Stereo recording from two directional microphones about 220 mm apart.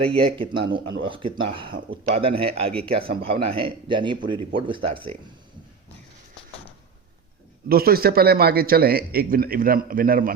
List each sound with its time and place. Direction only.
0.1 s speech: 25° right (ahead or behind)
7.7 s a man's voice: 45° right (ahead or behind)